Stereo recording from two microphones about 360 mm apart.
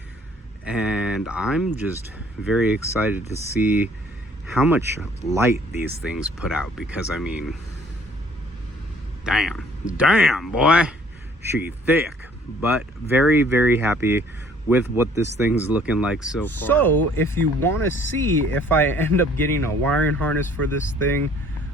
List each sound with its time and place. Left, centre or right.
0.6 s speech: centre
9.2 s speech: centre